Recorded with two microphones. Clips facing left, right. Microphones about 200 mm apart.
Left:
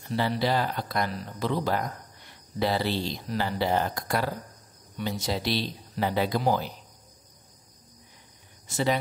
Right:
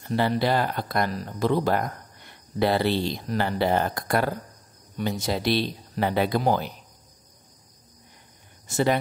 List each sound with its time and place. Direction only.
0.0 s speech: 55° right (ahead or behind)
8.6 s speech: 50° right (ahead or behind)